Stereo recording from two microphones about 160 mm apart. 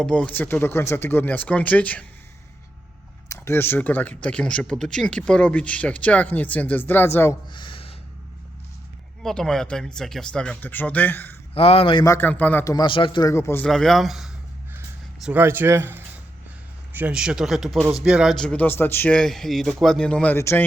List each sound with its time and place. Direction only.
0.0 s speech: 10° left (ahead or behind)
3.2 s speech: 15° left (ahead or behind)
7.5 s a sound: 30° left (ahead or behind)
9.2 s speech: 5° left (ahead or behind)
11.5 s speech: 35° left (ahead or behind)
12.0 s speech: 15° left (ahead or behind)
12.7 s a man's voice: 30° left (ahead or behind)
13.3 s speech: 15° left (ahead or behind)
13.7 s speech: centre (ahead or behind)
15.2 s speech: 10° right (ahead or behind); by 20.7 s 15° left (ahead or behind)